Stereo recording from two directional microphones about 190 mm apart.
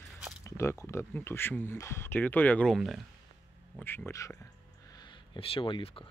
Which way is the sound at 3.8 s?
10° left (ahead or behind).